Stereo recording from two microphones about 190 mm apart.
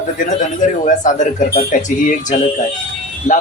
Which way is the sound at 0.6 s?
40° left (ahead or behind).